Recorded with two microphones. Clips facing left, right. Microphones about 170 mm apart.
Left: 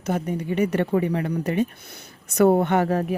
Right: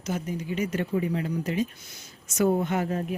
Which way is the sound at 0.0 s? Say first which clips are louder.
Left 5 dB; 60° left (ahead or behind).